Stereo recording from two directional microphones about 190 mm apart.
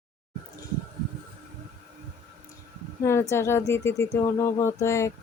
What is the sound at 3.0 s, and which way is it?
Speech, 15° left (ahead or behind).